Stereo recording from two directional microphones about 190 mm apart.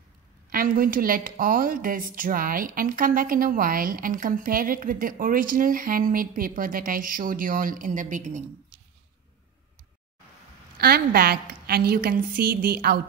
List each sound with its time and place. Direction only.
0.5 s a woman's voice: 50° right (ahead or behind)
10.8 s a woman's voice: 55° right (ahead or behind)